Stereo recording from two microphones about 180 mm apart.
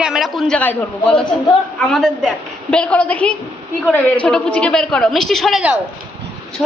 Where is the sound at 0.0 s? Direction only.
Centre (ahead or behind).